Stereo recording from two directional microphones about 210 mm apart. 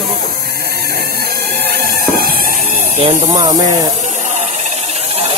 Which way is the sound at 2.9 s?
30° right (ahead or behind).